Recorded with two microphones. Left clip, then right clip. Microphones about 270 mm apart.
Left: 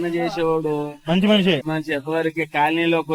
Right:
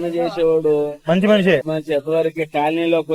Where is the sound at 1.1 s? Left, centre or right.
Centre.